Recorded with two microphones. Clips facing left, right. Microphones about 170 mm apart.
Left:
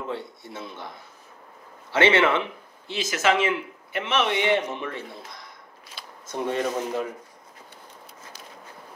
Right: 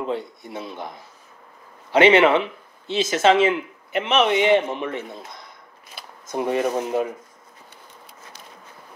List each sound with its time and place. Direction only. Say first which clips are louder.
0.0 s a man's voice: right 5 dB; 15° right (ahead or behind)